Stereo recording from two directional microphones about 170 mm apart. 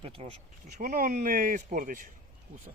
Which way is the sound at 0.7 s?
50° right (ahead or behind).